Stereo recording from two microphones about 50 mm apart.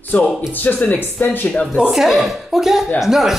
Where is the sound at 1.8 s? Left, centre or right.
Centre.